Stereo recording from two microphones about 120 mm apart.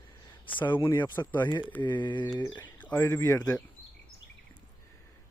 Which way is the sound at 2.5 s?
10° left (ahead or behind).